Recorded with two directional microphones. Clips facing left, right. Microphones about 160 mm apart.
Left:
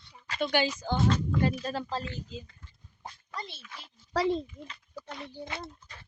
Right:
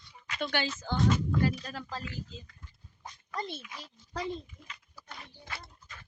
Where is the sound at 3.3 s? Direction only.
50° right (ahead or behind).